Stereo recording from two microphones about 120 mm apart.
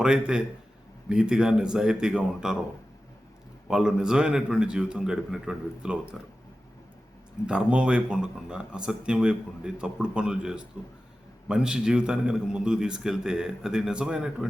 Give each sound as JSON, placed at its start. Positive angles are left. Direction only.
{"t": 0.0, "sound": "a man's voice", "side_deg": -5}
{"t": 3.7, "sound": "speech", "side_deg": -5}
{"t": 7.4, "sound": "a man's voice", "side_deg": -10}